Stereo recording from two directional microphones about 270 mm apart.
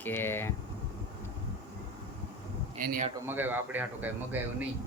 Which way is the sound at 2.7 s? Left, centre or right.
Right.